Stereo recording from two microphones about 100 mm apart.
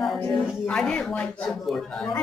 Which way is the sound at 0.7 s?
10° left (ahead or behind).